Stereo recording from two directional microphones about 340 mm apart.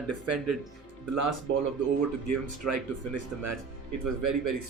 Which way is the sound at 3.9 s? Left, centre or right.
Right.